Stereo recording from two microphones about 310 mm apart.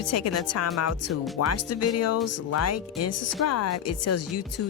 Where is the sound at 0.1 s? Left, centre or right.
Left.